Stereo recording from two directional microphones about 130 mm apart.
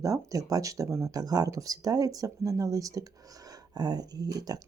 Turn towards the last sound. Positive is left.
turn(degrees=-30)  # may be behind; listen again after turning